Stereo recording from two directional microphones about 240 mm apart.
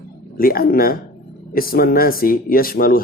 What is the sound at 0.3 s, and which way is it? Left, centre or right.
Speech, left.